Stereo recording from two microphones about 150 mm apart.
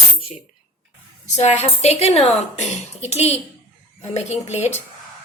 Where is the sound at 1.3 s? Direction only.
50° left (ahead or behind).